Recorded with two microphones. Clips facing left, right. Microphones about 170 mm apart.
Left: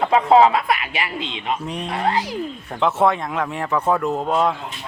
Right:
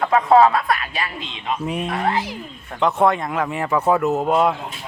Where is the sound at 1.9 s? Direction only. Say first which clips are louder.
Left 2 dB; 35° left (ahead or behind).